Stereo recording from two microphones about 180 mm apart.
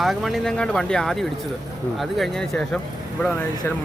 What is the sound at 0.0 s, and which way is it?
Speech, centre (ahead or behind).